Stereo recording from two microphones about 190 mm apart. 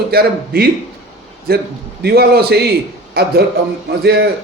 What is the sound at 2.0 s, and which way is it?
Speech, 55° right (ahead or behind).